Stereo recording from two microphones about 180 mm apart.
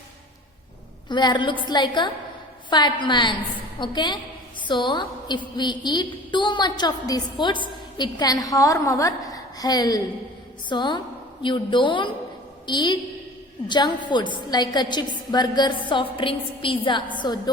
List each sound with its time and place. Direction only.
1.0 s a woman's voice: 25° left (ahead or behind)